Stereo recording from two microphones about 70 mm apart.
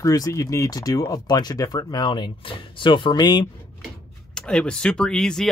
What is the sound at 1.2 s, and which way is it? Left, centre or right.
Speech, left.